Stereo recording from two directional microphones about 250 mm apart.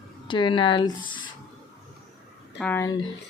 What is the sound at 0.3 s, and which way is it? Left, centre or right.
Speech, centre.